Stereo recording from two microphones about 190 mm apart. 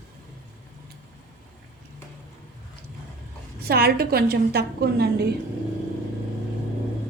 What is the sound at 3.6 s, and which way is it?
Speech, 55° right (ahead or behind).